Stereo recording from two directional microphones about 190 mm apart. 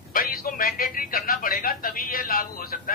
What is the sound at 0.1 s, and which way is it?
Speech, 50° left (ahead or behind).